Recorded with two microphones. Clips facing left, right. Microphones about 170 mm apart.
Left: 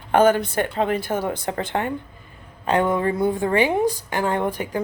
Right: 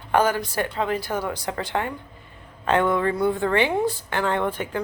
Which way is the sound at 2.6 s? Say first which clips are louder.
Left 1 dB; 15° left (ahead or behind).